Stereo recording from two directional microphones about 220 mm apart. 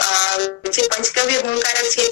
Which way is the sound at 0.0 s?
55° left (ahead or behind).